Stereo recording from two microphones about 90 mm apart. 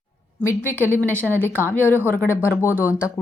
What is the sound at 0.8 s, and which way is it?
Speech, 25° right (ahead or behind).